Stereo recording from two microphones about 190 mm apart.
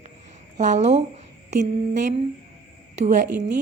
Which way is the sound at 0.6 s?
35° right (ahead or behind).